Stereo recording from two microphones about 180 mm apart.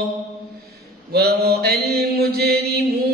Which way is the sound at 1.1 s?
60° right (ahead or behind).